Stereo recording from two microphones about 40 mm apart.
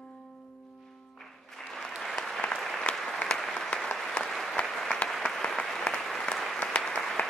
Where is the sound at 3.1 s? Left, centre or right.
Centre.